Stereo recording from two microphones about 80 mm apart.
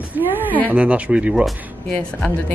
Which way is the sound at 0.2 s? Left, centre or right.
Right.